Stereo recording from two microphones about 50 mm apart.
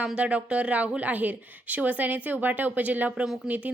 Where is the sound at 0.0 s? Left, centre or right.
Right.